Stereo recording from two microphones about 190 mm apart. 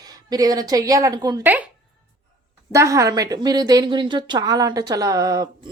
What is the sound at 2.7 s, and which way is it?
A woman's voice, 15° right (ahead or behind).